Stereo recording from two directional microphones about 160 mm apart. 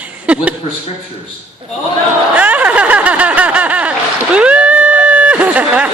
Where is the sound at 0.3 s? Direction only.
10° right (ahead or behind).